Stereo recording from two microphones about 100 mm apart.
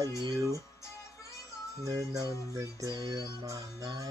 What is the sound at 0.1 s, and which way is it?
Speech, 30° left (ahead or behind).